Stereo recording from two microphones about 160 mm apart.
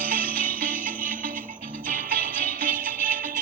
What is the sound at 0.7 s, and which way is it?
Music, 10° left (ahead or behind).